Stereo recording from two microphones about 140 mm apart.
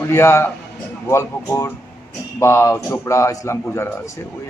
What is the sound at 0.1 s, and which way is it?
A man's voice, 20° left (ahead or behind).